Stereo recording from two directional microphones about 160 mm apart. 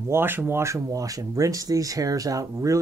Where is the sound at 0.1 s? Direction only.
15° right (ahead or behind).